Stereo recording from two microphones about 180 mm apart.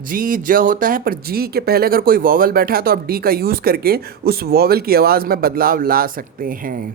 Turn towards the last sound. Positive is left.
turn(degrees=-50)  # may be behind; listen again after turning